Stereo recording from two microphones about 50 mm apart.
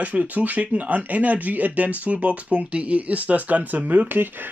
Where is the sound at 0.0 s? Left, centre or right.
Right.